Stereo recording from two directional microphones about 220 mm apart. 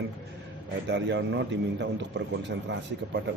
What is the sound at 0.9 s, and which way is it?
A man's voice, 55° right (ahead or behind).